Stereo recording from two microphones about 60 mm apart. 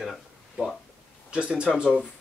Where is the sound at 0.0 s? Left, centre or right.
Centre.